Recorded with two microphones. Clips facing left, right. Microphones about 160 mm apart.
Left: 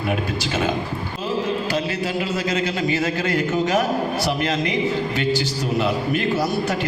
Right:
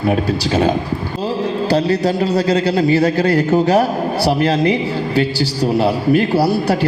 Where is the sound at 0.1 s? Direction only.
35° right (ahead or behind).